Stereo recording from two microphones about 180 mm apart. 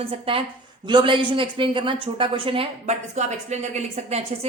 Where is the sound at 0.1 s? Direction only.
30° right (ahead or behind).